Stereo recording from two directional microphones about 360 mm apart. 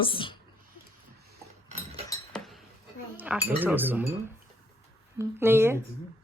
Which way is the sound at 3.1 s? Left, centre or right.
Centre.